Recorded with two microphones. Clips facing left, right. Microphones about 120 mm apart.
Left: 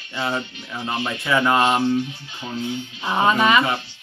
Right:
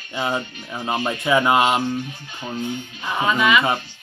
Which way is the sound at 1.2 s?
15° right (ahead or behind).